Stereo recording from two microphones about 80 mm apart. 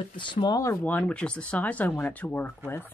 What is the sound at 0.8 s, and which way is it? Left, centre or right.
Speech, centre.